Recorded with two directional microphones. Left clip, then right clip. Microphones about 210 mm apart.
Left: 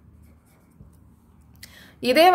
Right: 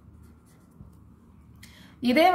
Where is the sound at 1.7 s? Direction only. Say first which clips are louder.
Left 5 dB; 45° left (ahead or behind).